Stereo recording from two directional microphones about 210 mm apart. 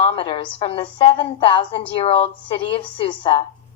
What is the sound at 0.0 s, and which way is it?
A woman's voice, 25° left (ahead or behind).